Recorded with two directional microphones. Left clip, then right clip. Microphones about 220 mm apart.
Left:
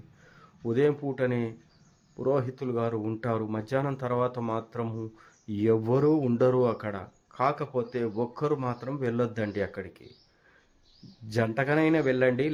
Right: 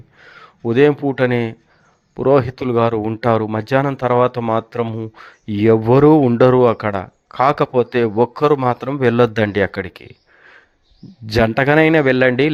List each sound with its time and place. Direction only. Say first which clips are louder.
0.2 s speech: right 13 dB; 30° right (ahead or behind)
11.3 s speech: right 13 dB; 35° right (ahead or behind)